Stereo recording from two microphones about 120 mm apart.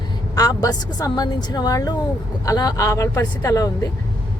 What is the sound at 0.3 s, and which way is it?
Speech, 30° left (ahead or behind).